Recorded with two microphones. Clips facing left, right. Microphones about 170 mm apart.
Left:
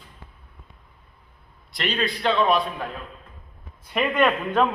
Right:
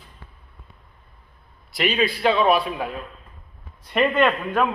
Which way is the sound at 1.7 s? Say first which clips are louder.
Right 4 dB; 5° right (ahead or behind).